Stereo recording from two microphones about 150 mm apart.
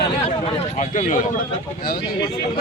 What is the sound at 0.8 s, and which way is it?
Speech, 55° left (ahead or behind).